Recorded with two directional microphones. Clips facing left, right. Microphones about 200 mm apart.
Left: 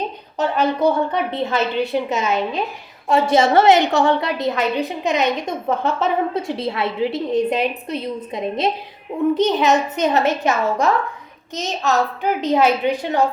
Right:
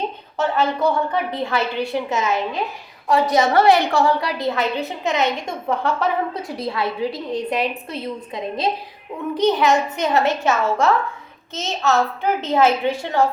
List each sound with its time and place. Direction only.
0.3 s a woman's voice: 15° left (ahead or behind)